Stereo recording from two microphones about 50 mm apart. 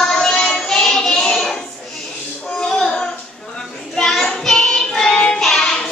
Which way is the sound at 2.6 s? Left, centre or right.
Centre.